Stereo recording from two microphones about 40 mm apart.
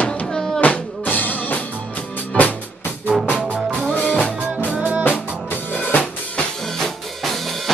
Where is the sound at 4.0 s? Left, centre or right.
Left.